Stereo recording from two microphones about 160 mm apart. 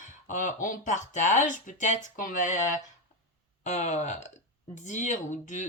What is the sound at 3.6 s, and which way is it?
Speech, 45° left (ahead or behind).